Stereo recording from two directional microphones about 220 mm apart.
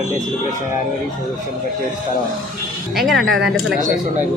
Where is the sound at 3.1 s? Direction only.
55° right (ahead or behind).